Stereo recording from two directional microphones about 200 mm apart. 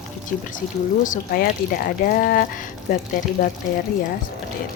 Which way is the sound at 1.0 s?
45° left (ahead or behind).